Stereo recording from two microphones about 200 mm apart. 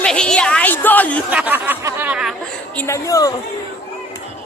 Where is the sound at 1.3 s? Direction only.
10° right (ahead or behind).